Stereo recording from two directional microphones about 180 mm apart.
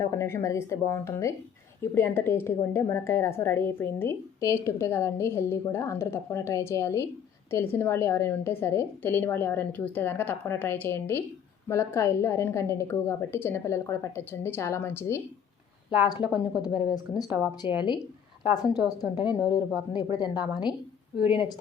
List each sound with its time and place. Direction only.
0.2 s a woman's voice: 15° left (ahead or behind)
16.2 s speech: 5° right (ahead or behind)
16.8 s a woman's voice: 20° left (ahead or behind)
17.2 s speech: 10° right (ahead or behind)
17.7 s a woman's voice: 25° left (ahead or behind)
19.2 s speech: 5° right (ahead or behind)
20.1 s a woman's voice: 25° left (ahead or behind)